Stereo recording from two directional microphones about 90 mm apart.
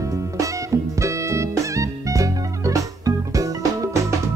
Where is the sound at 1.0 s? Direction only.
35° right (ahead or behind).